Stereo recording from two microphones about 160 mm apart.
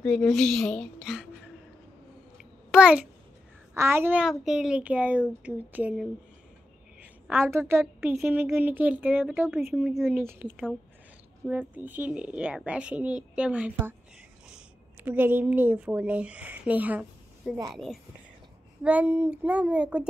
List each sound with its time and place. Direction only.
0.0 s a woman's voice: 5° left (ahead or behind)
2.3 s a sound: 5° right (ahead or behind)
3.7 s speech: 15° right (ahead or behind)
7.0 s a sound: 10° right (ahead or behind)
8.0 s speech: 10° right (ahead or behind)
15.0 s speech: 10° right (ahead or behind)
17.4 s a woman's voice: centre (ahead or behind)
18.8 s speech: 10° right (ahead or behind)